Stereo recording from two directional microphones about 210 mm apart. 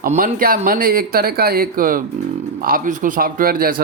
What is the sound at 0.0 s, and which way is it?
Speech, 40° right (ahead or behind).